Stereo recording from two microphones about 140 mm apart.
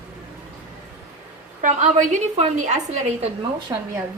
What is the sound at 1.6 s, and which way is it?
A woman's voice, 60° right (ahead or behind).